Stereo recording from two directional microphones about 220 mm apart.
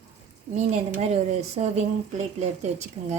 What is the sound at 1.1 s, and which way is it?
A woman's voice, 30° right (ahead or behind).